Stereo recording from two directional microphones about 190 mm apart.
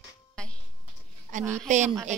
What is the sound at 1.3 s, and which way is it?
Speech, 40° right (ahead or behind).